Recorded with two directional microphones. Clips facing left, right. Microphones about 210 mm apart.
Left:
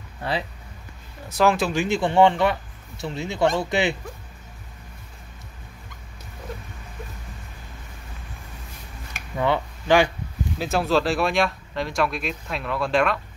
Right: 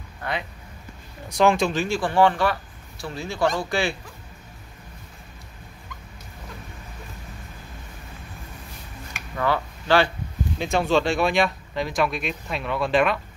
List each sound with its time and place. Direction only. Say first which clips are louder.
0.2 s speech: left 3 dB; 30° left (ahead or behind)
1.3 s speech: right 1 dB; centre (ahead or behind)
1.8 s speech: left 2 dB; 20° left (ahead or behind)
9.4 s speech: left 1 dB; 15° left (ahead or behind)
10.6 s speech: even; centre (ahead or behind)